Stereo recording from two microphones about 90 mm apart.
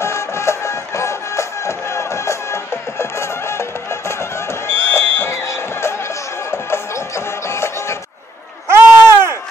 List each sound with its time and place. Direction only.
0.0 s music: 30° left (ahead or behind)
8.6 s bleat: 30° right (ahead or behind)